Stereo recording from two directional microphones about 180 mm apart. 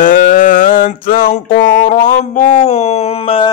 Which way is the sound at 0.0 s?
45° left (ahead or behind).